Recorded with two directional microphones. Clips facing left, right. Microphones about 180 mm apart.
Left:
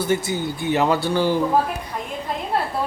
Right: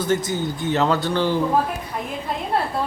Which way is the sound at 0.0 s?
10° left (ahead or behind).